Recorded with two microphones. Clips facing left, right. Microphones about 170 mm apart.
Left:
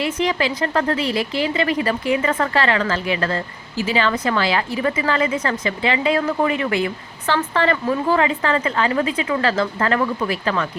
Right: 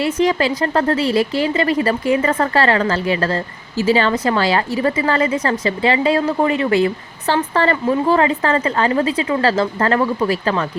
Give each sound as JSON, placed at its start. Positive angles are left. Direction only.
{"t": 0.0, "sound": "a woman's voice", "side_deg": -40}